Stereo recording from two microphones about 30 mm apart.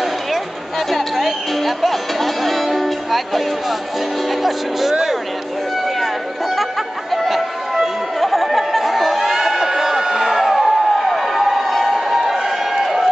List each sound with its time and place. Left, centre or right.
0.9 s music: centre
4.4 s speech: centre
7.2 s music: centre
8.2 s chatter: centre